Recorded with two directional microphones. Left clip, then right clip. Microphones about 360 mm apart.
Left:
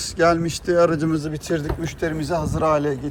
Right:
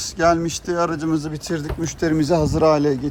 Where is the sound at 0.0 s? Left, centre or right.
Centre.